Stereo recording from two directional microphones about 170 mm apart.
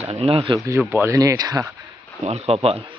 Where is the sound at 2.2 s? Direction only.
40° right (ahead or behind).